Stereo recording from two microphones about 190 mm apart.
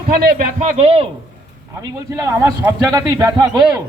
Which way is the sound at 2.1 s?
15° right (ahead or behind).